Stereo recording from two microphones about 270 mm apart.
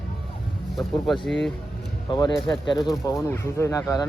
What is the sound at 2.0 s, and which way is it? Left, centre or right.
Speech, centre.